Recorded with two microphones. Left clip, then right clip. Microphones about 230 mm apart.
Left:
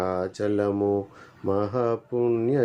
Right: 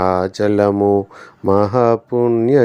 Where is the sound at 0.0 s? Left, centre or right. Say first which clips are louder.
Right 11 dB; right.